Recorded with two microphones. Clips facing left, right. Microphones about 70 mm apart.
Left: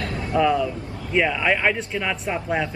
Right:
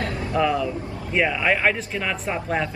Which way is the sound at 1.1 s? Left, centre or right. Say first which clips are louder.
Left 1 dB; centre.